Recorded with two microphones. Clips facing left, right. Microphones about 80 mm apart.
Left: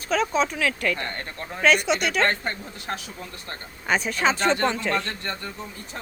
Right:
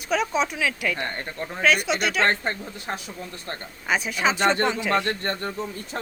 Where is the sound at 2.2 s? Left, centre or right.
Right.